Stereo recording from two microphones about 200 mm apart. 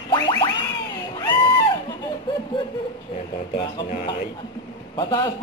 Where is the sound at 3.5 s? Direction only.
35° left (ahead or behind).